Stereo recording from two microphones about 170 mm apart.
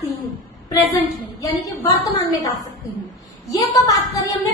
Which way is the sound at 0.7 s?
20° left (ahead or behind).